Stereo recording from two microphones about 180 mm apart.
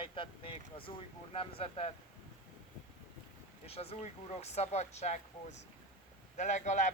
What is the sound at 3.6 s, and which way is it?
Speech, 35° left (ahead or behind).